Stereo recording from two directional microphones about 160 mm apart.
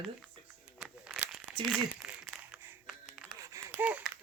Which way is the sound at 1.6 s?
5° right (ahead or behind).